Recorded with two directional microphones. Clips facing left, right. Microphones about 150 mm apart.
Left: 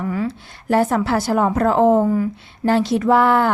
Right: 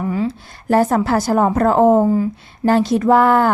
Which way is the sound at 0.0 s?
25° right (ahead or behind).